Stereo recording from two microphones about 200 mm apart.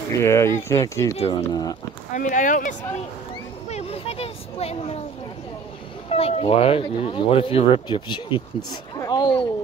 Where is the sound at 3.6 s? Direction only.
30° left (ahead or behind).